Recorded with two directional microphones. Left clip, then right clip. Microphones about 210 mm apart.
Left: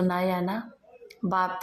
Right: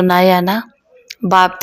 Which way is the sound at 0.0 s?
40° right (ahead or behind).